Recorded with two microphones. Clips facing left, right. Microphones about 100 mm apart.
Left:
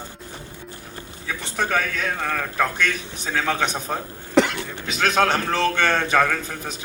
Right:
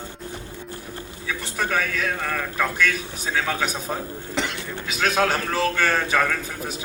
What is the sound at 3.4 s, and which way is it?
Speech, 5° right (ahead or behind).